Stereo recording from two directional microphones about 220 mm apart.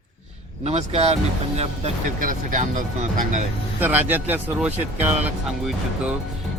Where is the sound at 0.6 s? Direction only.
30° right (ahead or behind).